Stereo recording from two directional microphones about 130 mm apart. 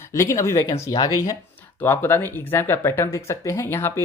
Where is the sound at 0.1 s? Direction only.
25° left (ahead or behind).